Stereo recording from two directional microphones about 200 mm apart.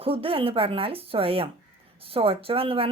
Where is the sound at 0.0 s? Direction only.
30° right (ahead or behind).